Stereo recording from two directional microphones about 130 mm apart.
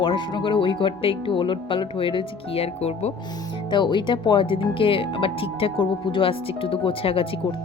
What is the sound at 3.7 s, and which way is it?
Speech, 35° left (ahead or behind).